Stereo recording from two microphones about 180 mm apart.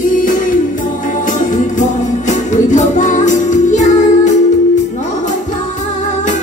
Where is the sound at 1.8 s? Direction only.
40° left (ahead or behind).